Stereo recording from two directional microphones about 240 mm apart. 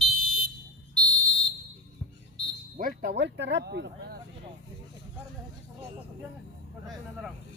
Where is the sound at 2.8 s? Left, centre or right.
Right.